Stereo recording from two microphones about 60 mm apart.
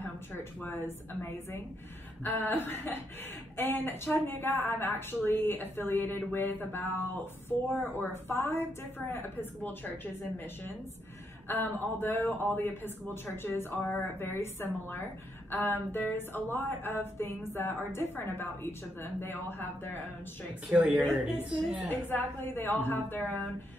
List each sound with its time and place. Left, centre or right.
0.0 s a woman's voice: left
20.7 s a woman's voice: right
22.1 s a woman's voice: left